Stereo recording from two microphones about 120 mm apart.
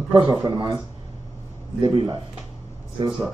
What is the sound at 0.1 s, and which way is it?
Speech, 35° right (ahead or behind).